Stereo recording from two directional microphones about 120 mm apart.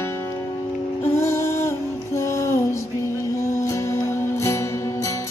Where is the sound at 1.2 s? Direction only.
25° left (ahead or behind).